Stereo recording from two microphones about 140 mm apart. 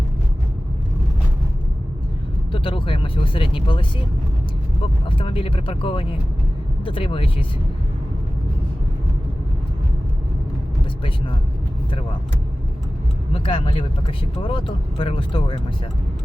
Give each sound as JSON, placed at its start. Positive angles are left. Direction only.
{"t": 2.5, "sound": "a sound", "side_deg": 40}
{"t": 5.0, "sound": "speech", "side_deg": 40}
{"t": 13.3, "sound": "speech", "side_deg": 40}